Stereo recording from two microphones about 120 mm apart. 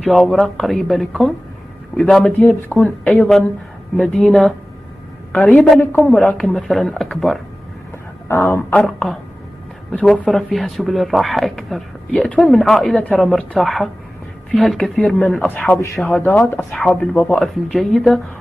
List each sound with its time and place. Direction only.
0.0 s speech: centre (ahead or behind)
2.7 s a woman's voice: 15° left (ahead or behind)
5.9 s speech: centre (ahead or behind)
8.3 s a woman's voice: 20° left (ahead or behind)
8.7 s speech: 5° left (ahead or behind)
12.1 s a woman's voice: 10° left (ahead or behind)
12.4 s a woman's voice: centre (ahead or behind)
17.4 s speech: 5° left (ahead or behind)